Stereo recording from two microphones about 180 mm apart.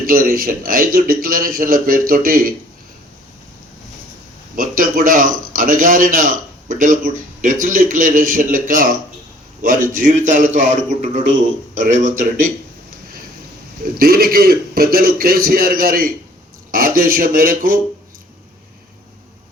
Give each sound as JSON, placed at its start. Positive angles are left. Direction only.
{"t": 0.1, "sound": "a man's voice", "side_deg": -55}
{"t": 4.5, "sound": "a man's voice", "side_deg": -50}
{"t": 14.0, "sound": "a man's voice", "side_deg": -55}